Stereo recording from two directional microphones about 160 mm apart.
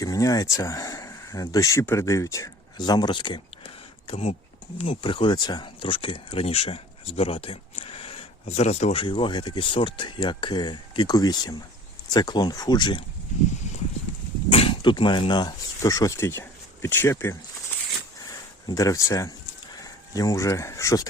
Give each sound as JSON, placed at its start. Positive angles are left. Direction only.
{"t": 0.0, "sound": "speech", "side_deg": 20}
{"t": 14.5, "sound": "speech", "side_deg": 35}
{"t": 18.7, "sound": "speech", "side_deg": 20}